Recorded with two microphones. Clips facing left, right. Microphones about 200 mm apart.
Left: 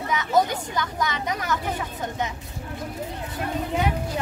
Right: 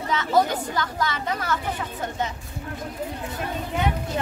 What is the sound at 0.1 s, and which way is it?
Speech, 15° left (ahead or behind).